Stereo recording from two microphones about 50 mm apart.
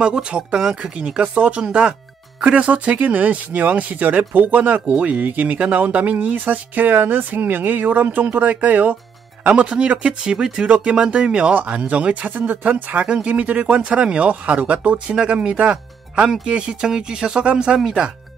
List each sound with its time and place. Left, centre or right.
0.0 s speech: centre
0.6 s speech: centre
0.9 s speech: right
9.4 s speech: right
13.1 s speech: right